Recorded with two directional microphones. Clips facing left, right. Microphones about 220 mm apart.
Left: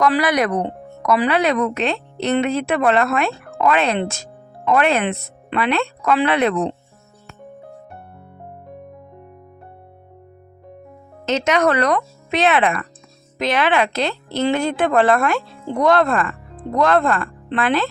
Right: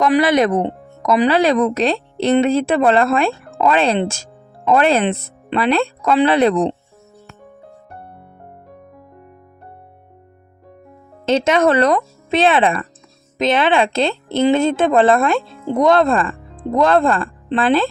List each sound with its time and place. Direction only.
0.0 s speech: 25° right (ahead or behind)
11.3 s speech: 25° right (ahead or behind)